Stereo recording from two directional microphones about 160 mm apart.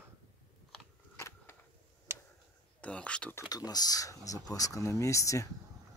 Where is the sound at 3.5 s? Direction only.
25° left (ahead or behind).